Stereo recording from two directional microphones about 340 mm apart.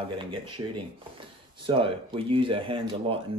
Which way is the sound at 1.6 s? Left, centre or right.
Centre.